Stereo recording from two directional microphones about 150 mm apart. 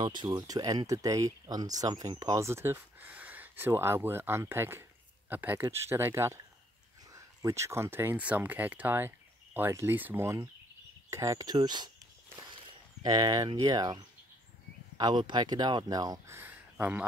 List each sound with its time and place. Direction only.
0.0 s speech: 30° right (ahead or behind); by 17.0 s 10° right (ahead or behind)